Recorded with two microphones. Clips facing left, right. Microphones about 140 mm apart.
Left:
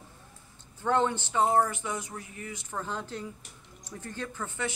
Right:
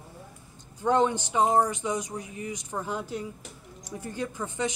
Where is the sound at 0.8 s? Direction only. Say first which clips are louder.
Right 3 dB; 15° right (ahead or behind).